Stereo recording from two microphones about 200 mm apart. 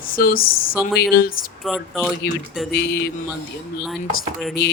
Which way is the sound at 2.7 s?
55° left (ahead or behind).